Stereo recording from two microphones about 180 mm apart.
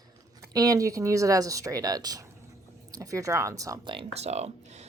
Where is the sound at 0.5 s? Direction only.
20° right (ahead or behind).